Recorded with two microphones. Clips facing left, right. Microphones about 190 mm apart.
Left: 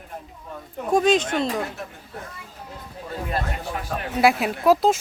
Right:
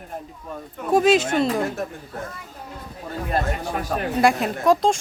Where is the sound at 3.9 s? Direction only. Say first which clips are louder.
Right 5 dB; 40° right (ahead or behind).